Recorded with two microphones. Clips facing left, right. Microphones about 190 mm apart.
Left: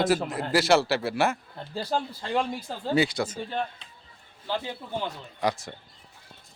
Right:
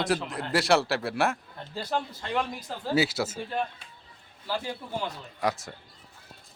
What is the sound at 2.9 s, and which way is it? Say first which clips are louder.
Speech: left 1 dB; 5° right (ahead or behind).